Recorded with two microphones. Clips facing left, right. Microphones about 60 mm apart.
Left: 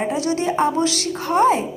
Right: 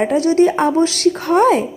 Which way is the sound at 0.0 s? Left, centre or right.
Right.